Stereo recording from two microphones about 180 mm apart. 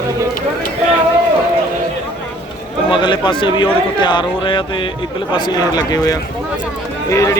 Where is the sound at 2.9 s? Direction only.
25° left (ahead or behind).